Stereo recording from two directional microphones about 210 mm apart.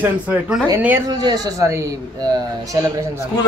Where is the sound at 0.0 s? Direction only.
10° right (ahead or behind).